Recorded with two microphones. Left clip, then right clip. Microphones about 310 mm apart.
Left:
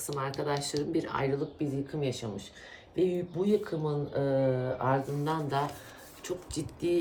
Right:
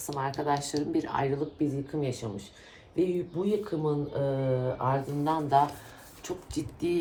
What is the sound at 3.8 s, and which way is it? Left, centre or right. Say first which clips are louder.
Speech: right 1 dB; centre.